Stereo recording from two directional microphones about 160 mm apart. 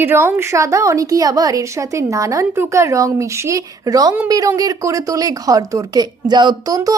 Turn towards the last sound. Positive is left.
turn(degrees=-20)  # may be behind; listen again after turning